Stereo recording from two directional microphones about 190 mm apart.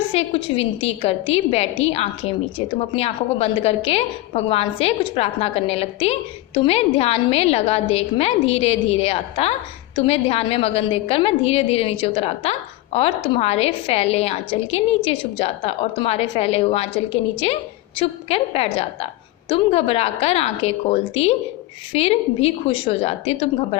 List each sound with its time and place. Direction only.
0.1 s a woman's voice: 30° left (ahead or behind)